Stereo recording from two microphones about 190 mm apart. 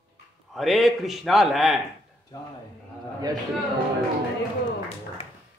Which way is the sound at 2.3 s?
20° left (ahead or behind).